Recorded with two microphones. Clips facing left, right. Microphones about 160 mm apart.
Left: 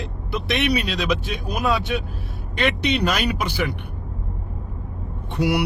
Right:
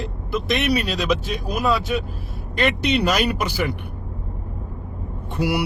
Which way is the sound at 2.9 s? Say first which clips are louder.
Right 2 dB; 50° right (ahead or behind).